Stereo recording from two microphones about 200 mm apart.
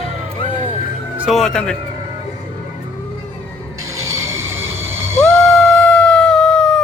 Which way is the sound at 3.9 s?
15° right (ahead or behind).